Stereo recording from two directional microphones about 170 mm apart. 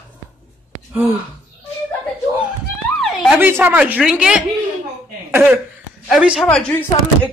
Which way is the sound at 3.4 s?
10° right (ahead or behind).